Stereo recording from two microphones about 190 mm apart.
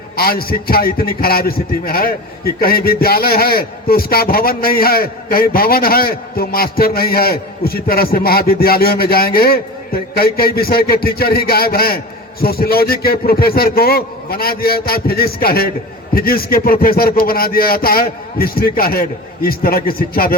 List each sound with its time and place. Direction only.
0.2 s a man's voice: 50° left (ahead or behind)